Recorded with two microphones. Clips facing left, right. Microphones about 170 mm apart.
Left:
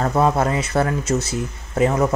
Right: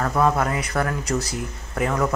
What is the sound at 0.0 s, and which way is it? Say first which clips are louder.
Speech: left 3 dB; 25° left (ahead or behind).